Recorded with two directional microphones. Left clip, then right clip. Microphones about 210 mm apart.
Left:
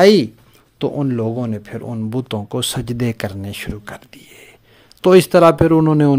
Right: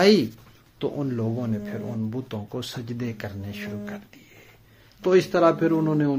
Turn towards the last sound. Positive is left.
turn(degrees=50)  # may be behind; listen again after turning